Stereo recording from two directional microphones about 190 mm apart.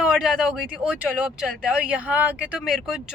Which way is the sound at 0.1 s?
Centre (ahead or behind).